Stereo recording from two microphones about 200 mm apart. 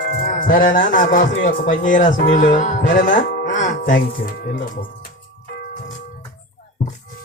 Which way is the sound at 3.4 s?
40° left (ahead or behind).